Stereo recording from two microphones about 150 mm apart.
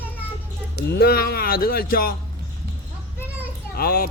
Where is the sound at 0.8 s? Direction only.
90° left.